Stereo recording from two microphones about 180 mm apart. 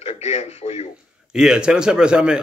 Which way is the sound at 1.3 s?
5° right (ahead or behind).